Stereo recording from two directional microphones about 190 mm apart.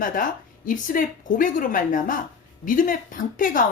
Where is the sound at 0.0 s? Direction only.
45° left (ahead or behind).